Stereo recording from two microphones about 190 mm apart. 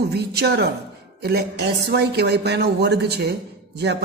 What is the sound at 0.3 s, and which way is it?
Speech, 55° right (ahead or behind).